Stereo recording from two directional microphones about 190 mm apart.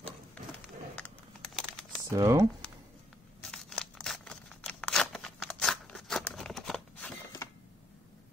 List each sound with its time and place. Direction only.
0.9 s typing: 5° left (ahead or behind)
2.1 s speech: 15° right (ahead or behind)
3.4 s scissors: 5° left (ahead or behind)